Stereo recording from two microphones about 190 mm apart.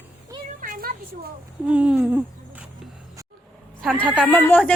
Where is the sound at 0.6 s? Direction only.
50° right (ahead or behind).